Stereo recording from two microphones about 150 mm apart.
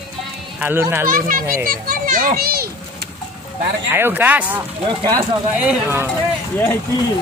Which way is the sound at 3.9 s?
15° right (ahead or behind).